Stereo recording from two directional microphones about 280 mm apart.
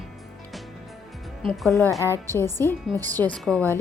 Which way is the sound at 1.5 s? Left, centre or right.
Centre.